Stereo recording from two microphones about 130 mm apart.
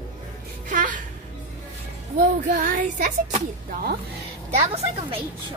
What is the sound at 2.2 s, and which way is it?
Speech, 75° right (ahead or behind).